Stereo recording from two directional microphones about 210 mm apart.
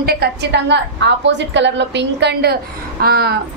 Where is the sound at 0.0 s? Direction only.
50° right (ahead or behind).